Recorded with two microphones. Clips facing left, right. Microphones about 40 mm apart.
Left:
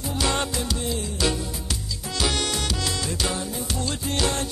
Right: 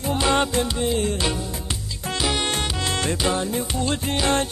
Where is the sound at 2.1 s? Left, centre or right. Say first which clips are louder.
Right 1 dB; centre.